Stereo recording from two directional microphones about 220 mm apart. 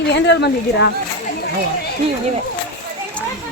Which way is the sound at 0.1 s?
50° left (ahead or behind).